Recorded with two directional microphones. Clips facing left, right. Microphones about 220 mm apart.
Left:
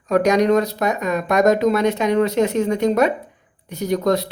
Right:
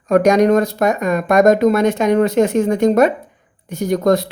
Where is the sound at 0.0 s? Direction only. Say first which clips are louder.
Right 4 dB; 50° right (ahead or behind).